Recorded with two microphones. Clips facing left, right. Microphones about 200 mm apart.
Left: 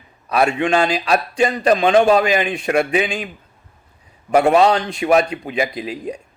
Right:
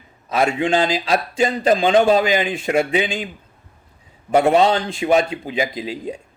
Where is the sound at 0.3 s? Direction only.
25° right (ahead or behind).